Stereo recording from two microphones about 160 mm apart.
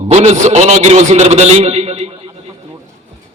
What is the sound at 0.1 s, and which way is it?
A man's voice, 45° right (ahead or behind).